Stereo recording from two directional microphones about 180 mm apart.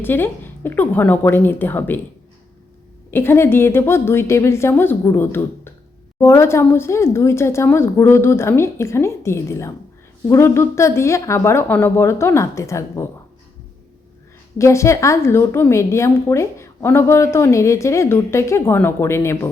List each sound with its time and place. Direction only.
0.0 s a woman's voice: 10° left (ahead or behind)
3.1 s a woman's voice: 15° left (ahead or behind)
14.6 s a woman's voice: 15° left (ahead or behind)